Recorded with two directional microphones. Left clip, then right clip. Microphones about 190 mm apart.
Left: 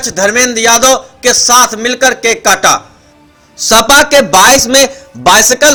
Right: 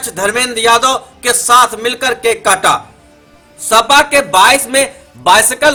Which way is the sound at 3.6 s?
40° left (ahead or behind).